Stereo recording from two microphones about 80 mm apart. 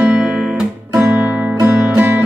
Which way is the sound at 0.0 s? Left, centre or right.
Centre.